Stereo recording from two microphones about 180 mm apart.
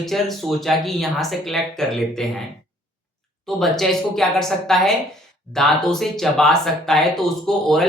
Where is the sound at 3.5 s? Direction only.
Centre (ahead or behind).